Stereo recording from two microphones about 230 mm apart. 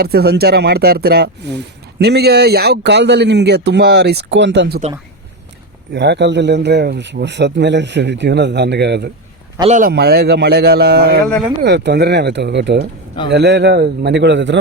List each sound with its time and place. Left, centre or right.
0.0 s speech: right
5.9 s speech: right
9.6 s speech: right
9.9 s speech: right